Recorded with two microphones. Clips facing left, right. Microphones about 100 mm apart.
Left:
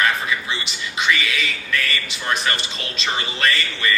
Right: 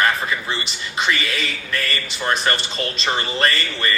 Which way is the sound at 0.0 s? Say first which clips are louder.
Right 1 dB; 40° right (ahead or behind).